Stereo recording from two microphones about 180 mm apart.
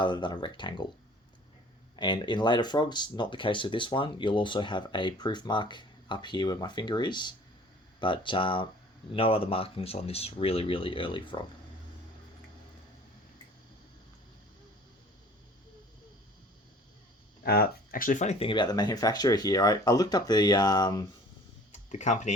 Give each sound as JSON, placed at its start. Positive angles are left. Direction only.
{"t": 0.0, "sound": "speech", "side_deg": 25}
{"t": 2.0, "sound": "speech", "side_deg": 25}
{"t": 17.4, "sound": "speech", "side_deg": 60}
{"t": 21.7, "sound": "a sound", "side_deg": 40}